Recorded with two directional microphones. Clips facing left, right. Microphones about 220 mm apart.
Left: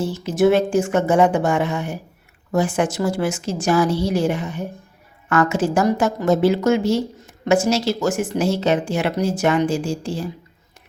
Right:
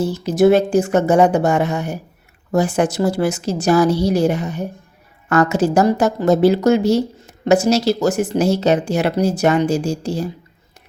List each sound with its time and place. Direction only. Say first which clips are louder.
0.0 s speech: right 3 dB; 40° right (ahead or behind)